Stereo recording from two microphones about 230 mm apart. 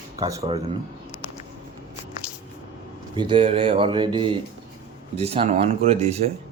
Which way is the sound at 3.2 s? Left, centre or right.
Right.